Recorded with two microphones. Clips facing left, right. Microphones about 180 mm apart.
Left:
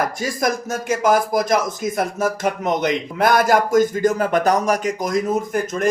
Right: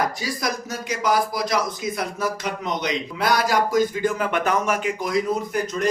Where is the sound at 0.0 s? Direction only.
50° left (ahead or behind).